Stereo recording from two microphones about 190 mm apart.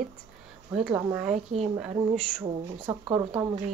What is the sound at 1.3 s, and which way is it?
Speech, 35° right (ahead or behind).